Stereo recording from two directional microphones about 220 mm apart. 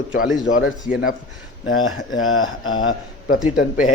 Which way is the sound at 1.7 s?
65° left (ahead or behind).